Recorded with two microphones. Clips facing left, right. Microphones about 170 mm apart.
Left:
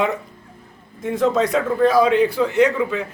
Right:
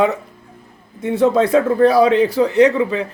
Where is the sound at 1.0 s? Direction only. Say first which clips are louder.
Right 4 dB; 30° right (ahead or behind).